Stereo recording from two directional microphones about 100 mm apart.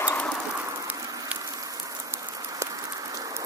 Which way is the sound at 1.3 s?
35° right (ahead or behind).